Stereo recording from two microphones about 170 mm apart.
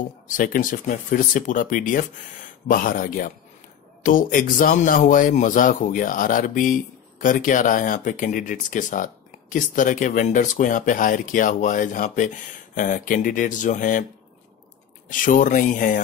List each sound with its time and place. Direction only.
0.3 s a man's voice: 55° left (ahead or behind)
15.0 s a man's voice: 50° left (ahead or behind)